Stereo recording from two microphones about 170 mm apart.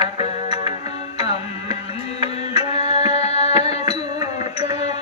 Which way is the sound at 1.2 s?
35° left (ahead or behind).